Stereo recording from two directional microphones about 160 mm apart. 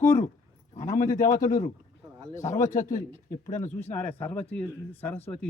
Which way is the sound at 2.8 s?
55° left (ahead or behind).